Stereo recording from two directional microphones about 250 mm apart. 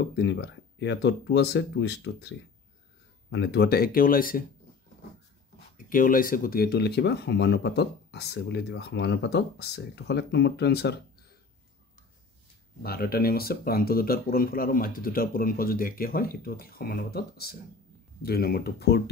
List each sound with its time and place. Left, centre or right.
0.1 s speech: left
5.8 s speech: left
12.8 s speech: left